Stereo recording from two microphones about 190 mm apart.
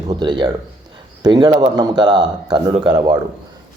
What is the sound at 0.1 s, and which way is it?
Speech, 25° right (ahead or behind).